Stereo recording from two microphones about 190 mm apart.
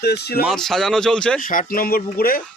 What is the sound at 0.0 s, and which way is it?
Speech, 55° left (ahead or behind).